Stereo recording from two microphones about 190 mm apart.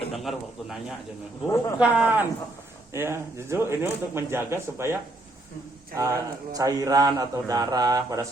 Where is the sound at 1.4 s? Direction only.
15° left (ahead or behind).